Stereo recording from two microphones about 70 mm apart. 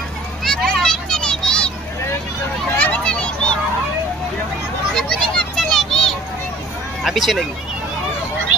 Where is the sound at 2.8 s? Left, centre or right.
Centre.